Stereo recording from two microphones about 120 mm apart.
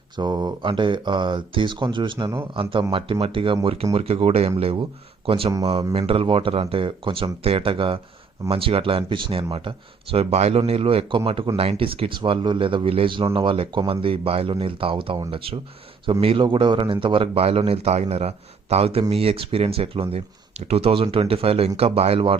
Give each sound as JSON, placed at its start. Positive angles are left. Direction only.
{"t": 0.2, "sound": "speech", "side_deg": -35}
{"t": 16.2, "sound": "speech", "side_deg": -45}